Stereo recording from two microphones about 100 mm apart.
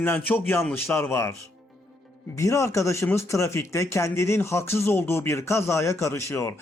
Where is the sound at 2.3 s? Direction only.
30° left (ahead or behind).